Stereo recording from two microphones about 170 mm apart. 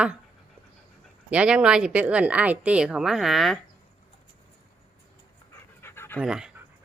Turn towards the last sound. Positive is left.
turn(degrees=-5)  # may be behind; listen again after turning